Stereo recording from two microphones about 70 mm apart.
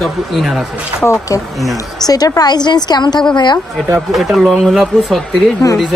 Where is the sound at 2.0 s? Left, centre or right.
Left.